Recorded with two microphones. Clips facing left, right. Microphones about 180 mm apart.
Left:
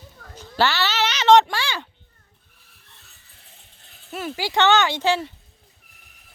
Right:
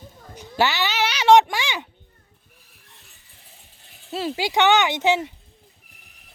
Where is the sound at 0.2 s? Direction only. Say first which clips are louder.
Even; 15° right (ahead or behind).